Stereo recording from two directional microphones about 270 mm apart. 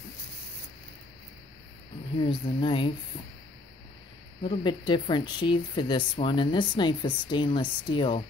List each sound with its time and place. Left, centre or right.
2.2 s speech: centre
4.4 s speech: centre